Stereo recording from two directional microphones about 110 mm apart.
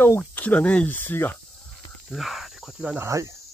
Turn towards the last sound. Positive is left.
turn(degrees=-30)  # may be behind; listen again after turning